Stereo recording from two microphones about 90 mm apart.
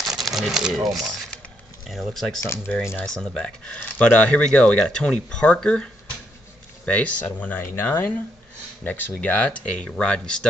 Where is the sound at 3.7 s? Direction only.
15° left (ahead or behind).